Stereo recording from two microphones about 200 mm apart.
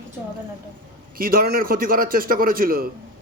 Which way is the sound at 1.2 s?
45° right (ahead or behind).